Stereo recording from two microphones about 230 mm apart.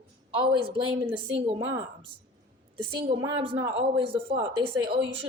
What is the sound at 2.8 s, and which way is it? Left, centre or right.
A woman's voice, right.